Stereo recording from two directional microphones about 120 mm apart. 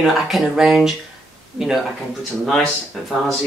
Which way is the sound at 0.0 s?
Centre (ahead or behind).